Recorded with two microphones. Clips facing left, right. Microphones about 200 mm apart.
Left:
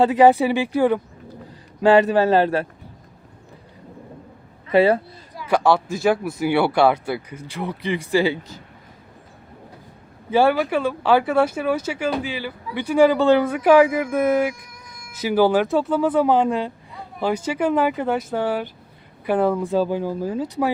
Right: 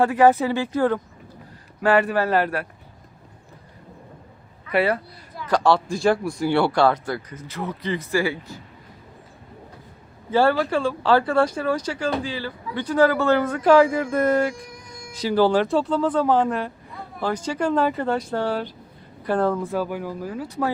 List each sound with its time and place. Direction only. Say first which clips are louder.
0.0 s speech: left 3 dB; 15° left (ahead or behind)
4.7 s speech: left 5 dB; 25° left (ahead or behind)
5.4 s speech: left 1 dB; 10° left (ahead or behind)
10.3 s speech: left 1 dB; 10° left (ahead or behind)
14.5 s music: right 5 dB; 30° right (ahead or behind)
15.2 s speech: left 1 dB; 5° left (ahead or behind)